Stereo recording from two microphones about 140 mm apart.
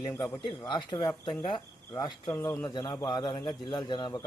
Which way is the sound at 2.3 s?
15° left (ahead or behind).